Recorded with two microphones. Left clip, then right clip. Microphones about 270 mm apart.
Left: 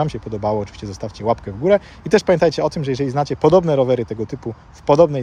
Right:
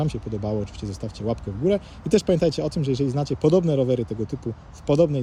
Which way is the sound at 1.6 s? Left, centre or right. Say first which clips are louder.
Left 6 dB; left.